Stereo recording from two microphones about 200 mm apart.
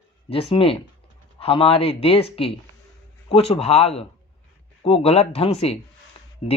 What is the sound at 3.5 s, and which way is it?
Speech, 30° left (ahead or behind).